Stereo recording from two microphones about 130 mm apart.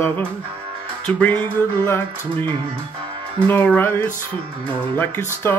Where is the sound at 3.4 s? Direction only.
10° left (ahead or behind).